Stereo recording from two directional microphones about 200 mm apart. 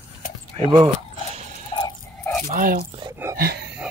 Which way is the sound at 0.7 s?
30° right (ahead or behind).